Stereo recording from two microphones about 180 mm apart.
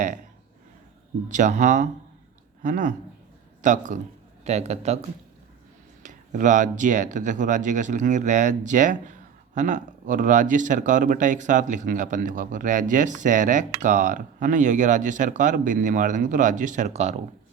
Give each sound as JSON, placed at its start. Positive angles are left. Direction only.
{"t": 1.3, "sound": "speech", "side_deg": -45}
{"t": 6.0, "sound": "speech", "side_deg": -45}